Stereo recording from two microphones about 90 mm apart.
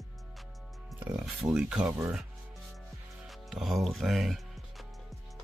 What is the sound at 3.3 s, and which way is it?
Music, centre (ahead or behind).